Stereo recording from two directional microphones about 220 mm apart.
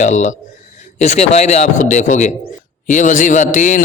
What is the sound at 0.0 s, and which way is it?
A man's voice, 35° left (ahead or behind).